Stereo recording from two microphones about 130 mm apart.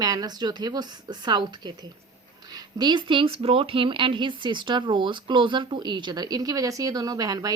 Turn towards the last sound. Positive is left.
turn(degrees=-30)  # may be behind; listen again after turning